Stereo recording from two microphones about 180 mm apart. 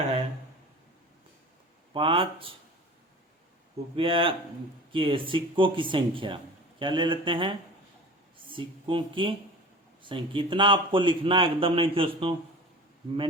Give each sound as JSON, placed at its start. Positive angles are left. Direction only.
{"t": 1.9, "sound": "speech", "side_deg": -25}
{"t": 3.9, "sound": "speech", "side_deg": -30}